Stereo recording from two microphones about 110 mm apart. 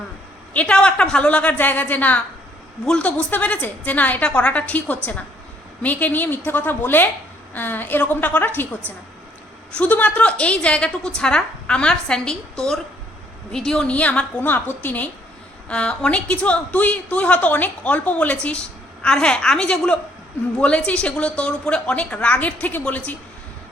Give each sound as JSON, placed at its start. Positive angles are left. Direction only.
{"t": 0.5, "sound": "a woman's voice", "side_deg": 10}